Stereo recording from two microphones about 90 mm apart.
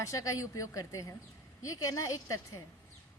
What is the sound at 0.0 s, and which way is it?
A woman's voice, 35° left (ahead or behind).